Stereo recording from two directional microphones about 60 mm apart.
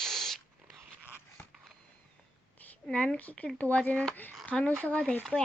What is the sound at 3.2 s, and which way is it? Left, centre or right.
Speech, left.